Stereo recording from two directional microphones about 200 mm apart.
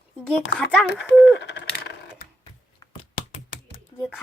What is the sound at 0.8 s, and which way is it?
Speech, 60° left (ahead or behind).